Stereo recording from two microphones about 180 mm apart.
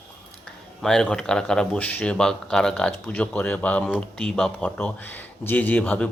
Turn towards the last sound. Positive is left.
turn(degrees=10)  # may be behind; listen again after turning